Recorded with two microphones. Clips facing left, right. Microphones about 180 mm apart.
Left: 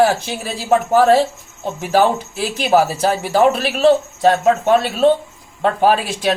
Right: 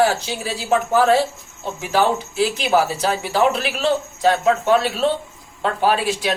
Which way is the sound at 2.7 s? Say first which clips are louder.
Left 6 dB; 45° left (ahead or behind).